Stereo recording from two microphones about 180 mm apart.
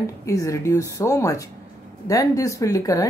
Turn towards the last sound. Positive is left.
turn(degrees=20)  # may be behind; listen again after turning